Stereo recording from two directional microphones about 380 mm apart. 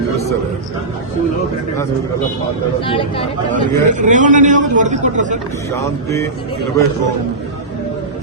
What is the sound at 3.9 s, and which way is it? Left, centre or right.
A man's voice, centre.